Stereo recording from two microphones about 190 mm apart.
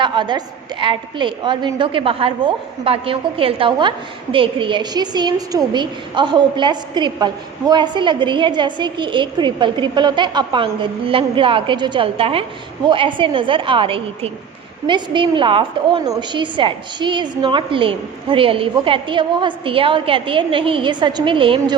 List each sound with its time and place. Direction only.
0.0 s a woman's voice: 25° right (ahead or behind)